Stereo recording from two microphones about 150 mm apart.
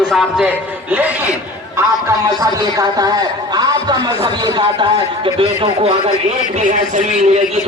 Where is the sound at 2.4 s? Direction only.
25° right (ahead or behind).